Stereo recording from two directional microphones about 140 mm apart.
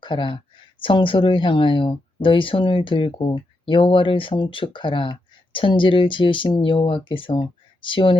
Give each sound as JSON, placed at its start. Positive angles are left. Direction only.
{"t": 0.0, "sound": "speech", "side_deg": 35}